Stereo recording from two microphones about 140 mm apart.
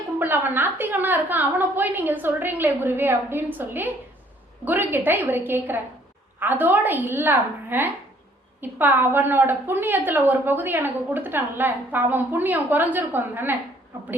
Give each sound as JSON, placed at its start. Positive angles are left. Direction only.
{"t": 0.2, "sound": "a woman's voice", "side_deg": -15}